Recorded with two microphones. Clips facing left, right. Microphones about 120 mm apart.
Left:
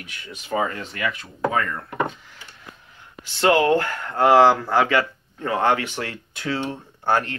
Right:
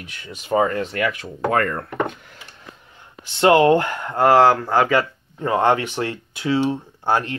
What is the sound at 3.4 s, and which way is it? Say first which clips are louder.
Speech: right 4 dB; 25° right (ahead or behind).